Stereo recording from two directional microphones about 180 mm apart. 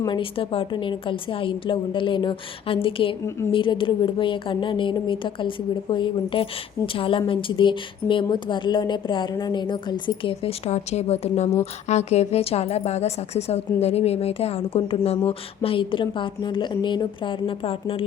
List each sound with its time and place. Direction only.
0.0 s a woman's voice: 30° left (ahead or behind)
3.2 s a woman's voice: 15° left (ahead or behind)
3.5 s a woman's voice: 30° left (ahead or behind)